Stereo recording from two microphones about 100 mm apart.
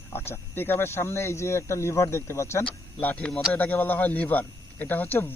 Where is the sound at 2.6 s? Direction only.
15° left (ahead or behind).